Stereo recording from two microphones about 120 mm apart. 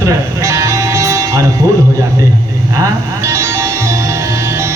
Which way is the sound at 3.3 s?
25° right (ahead or behind).